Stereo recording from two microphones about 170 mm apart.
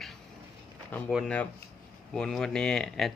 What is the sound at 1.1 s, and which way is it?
Speech, centre (ahead or behind).